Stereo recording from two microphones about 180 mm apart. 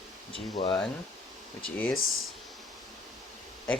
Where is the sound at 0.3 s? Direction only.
30° left (ahead or behind).